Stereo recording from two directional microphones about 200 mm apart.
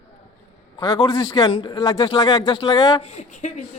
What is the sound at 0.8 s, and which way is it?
A man's voice, 20° left (ahead or behind).